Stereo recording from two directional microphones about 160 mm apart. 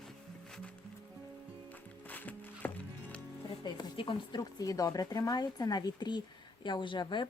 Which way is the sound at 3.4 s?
30° left (ahead or behind).